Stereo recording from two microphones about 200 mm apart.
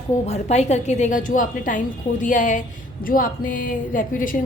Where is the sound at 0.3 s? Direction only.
35° left (ahead or behind).